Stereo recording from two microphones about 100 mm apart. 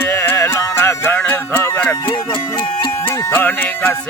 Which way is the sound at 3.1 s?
20° left (ahead or behind).